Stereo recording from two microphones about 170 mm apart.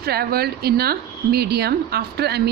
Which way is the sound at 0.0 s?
65° right (ahead or behind).